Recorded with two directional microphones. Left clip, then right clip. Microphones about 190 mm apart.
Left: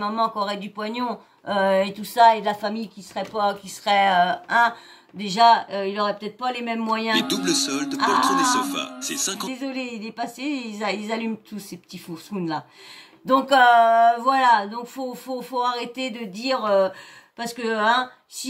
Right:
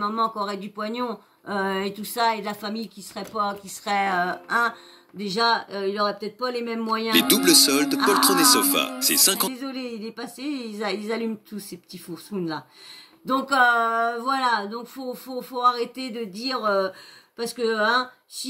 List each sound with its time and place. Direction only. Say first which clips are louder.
0.0 s speech: left 1 dB; centre (ahead or behind)
7.2 s speech: right 5 dB; 40° right (ahead or behind)
9.5 s speech: left 2 dB; centre (ahead or behind)
13.3 s speech: left 4 dB; centre (ahead or behind)